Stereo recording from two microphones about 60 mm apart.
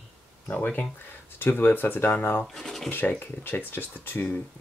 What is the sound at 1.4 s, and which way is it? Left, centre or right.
Speech, left.